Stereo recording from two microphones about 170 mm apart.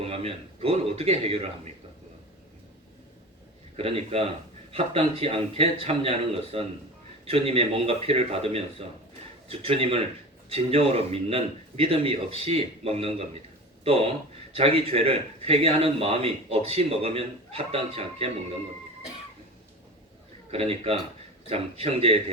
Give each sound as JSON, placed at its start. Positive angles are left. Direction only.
{"t": 0.0, "sound": "a man's voice", "side_deg": -35}
{"t": 3.8, "sound": "a man's voice", "side_deg": -35}
{"t": 20.5, "sound": "a man's voice", "side_deg": -35}